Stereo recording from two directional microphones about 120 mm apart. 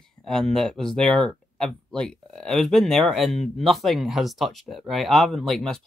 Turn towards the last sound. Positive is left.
turn(degrees=5)  # may be behind; listen again after turning